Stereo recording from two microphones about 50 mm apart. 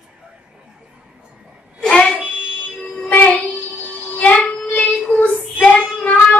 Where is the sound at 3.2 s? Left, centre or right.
Left.